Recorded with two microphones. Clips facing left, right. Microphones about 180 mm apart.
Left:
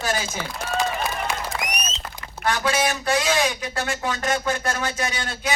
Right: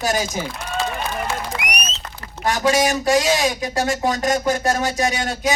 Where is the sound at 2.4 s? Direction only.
40° right (ahead or behind).